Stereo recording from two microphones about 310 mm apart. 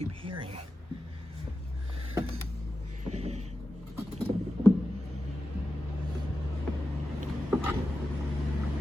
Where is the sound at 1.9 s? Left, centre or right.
Centre.